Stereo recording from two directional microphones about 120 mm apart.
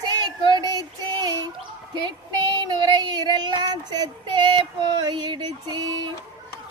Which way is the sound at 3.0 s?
35° right (ahead or behind).